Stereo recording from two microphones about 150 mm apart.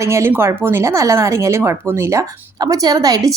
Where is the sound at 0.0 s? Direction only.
20° right (ahead or behind).